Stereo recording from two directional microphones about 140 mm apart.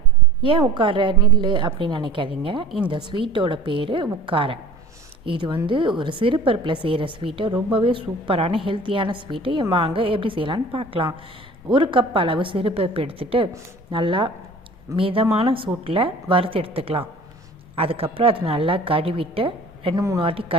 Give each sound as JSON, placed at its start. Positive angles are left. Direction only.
{"t": 0.7, "sound": "a woman's voice", "side_deg": -35}
{"t": 20.0, "sound": "a man's voice", "side_deg": -25}
{"t": 20.2, "sound": "a woman's voice", "side_deg": -40}